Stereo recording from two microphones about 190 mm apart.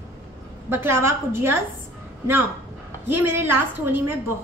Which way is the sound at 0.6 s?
10° right (ahead or behind).